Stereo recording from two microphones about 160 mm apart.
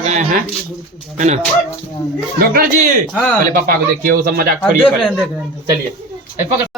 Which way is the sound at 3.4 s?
60° right (ahead or behind).